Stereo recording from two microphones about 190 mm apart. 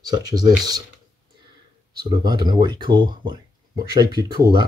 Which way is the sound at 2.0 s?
20° right (ahead or behind).